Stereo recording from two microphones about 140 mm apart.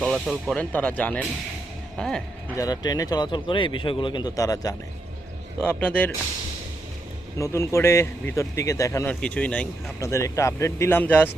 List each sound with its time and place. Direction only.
0.0 s speech: centre (ahead or behind)
2.6 s speech: 25° left (ahead or behind)
5.6 s speech: 10° left (ahead or behind)
7.3 s speech: 20° left (ahead or behind)
9.0 s speech: 10° left (ahead or behind)
10.0 s speech: 20° left (ahead or behind)